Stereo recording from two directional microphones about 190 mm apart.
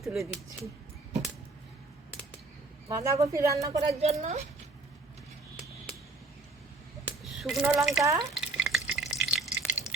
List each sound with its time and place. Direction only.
0.0 s speech: centre (ahead or behind)
2.9 s a woman's voice: 15° right (ahead or behind)
3.8 s a woman's voice: 35° right (ahead or behind)
7.4 s speech: centre (ahead or behind)
8.2 s stir: centre (ahead or behind)
9.2 s a sound: centre (ahead or behind)